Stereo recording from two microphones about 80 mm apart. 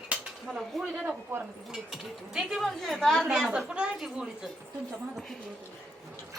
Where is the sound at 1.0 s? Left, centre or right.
Right.